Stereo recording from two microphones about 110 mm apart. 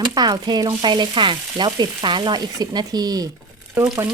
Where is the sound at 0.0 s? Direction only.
40° right (ahead or behind).